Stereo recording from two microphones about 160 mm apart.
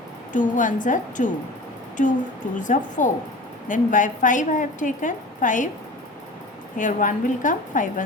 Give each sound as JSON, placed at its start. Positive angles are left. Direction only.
{"t": 0.3, "sound": "a woman's voice", "side_deg": 55}
{"t": 2.6, "sound": "a woman's voice", "side_deg": 50}
{"t": 6.7, "sound": "a woman's voice", "side_deg": 55}